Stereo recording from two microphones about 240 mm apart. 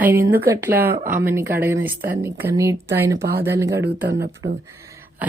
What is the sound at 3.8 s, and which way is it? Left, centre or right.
Speech, right.